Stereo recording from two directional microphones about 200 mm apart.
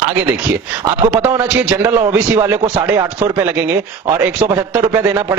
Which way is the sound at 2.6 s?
25° right (ahead or behind).